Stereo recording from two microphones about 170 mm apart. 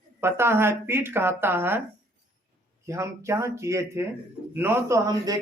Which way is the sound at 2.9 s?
15° right (ahead or behind).